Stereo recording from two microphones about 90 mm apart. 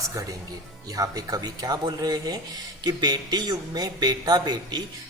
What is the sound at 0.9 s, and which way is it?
Speech, 40° right (ahead or behind).